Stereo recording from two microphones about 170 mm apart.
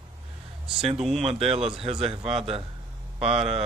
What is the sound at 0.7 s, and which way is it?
Speech, 35° right (ahead or behind).